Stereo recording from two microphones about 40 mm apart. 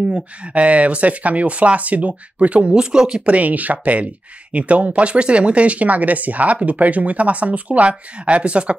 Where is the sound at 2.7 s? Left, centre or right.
Centre.